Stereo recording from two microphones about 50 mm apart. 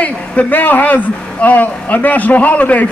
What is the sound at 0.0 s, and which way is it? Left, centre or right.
A man's voice, left.